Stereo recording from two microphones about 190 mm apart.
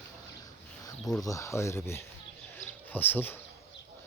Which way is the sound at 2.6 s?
10° left (ahead or behind).